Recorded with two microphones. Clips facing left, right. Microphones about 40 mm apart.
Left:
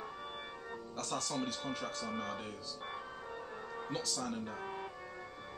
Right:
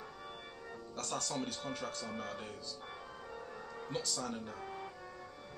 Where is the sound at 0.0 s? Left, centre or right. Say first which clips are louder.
Left 4 dB; left.